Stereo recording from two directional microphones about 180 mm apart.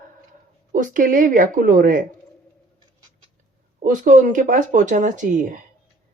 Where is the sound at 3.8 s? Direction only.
45° right (ahead or behind).